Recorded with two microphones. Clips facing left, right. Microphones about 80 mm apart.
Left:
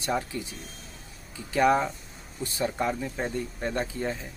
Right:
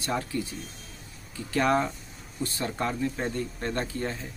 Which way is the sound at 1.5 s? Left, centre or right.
Centre.